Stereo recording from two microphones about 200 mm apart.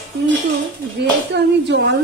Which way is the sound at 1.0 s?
60° right (ahead or behind).